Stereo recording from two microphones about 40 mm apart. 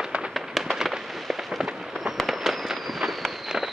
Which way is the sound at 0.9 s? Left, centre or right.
Centre.